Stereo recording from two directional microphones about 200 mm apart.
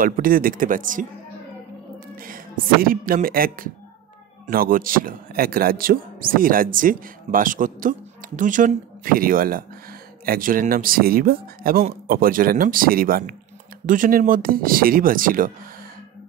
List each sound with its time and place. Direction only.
0.0 s a man's voice: 45° right (ahead or behind)
2.1 s a man's voice: 45° right (ahead or behind)